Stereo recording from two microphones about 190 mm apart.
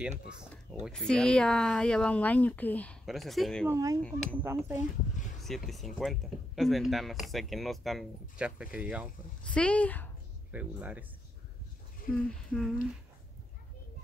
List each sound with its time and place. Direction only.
0.8 s speech: 5° left (ahead or behind)
3.6 s speech: 15° right (ahead or behind)
4.0 s speech: 5° left (ahead or behind)
4.4 s speech: 10° right (ahead or behind)
5.4 s speech: centre (ahead or behind)
9.4 s speech: 5° left (ahead or behind)
10.5 s speech: 10° right (ahead or behind)
12.3 s speech: centre (ahead or behind)